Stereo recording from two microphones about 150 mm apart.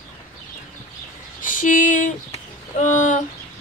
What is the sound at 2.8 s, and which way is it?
Speech, 55° left (ahead or behind).